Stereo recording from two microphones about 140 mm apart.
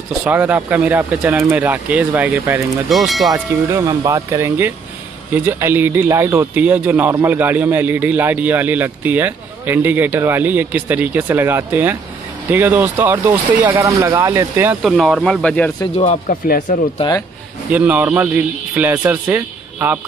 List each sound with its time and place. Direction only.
0.2 s speech: 10° right (ahead or behind)
2.9 s speech: centre (ahead or behind)
3.6 s speech: 25° right (ahead or behind)
14.8 s speech: centre (ahead or behind)
16.0 s speech: 65° left (ahead or behind); by 16.7 s 85° left
17.6 s speech: 10° right (ahead or behind)